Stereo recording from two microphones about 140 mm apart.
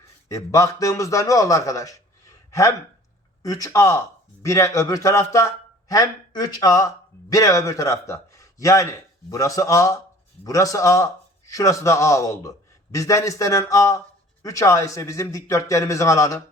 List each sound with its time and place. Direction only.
0.0 s a man's voice: 20° left (ahead or behind)